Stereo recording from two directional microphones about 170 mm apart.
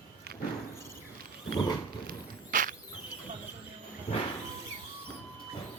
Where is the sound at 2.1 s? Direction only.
50° right (ahead or behind).